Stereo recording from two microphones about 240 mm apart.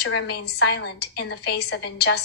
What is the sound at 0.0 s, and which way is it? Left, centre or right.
Speech, left.